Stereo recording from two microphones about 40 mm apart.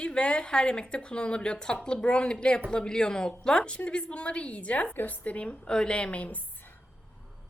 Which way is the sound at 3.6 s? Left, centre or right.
Left.